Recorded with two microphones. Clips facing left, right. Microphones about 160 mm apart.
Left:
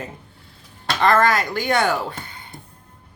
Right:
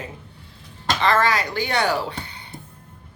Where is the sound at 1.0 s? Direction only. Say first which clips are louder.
Left 3 dB; 50° left (ahead or behind).